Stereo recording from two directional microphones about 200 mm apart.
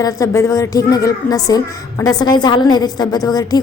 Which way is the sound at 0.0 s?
15° left (ahead or behind).